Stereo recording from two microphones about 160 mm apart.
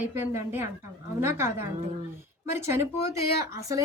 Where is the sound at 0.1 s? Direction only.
15° right (ahead or behind).